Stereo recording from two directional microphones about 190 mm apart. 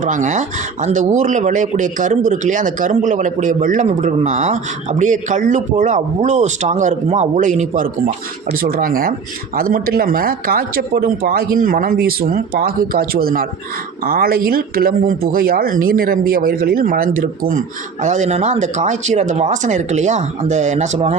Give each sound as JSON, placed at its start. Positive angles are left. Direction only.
{"t": 0.0, "sound": "speech", "side_deg": -40}
{"t": 18.0, "sound": "speech", "side_deg": -40}